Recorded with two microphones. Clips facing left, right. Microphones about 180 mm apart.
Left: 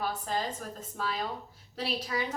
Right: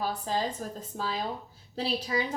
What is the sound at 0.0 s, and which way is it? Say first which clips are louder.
A woman's voice: right 2 dB; 35° right (ahead or behind).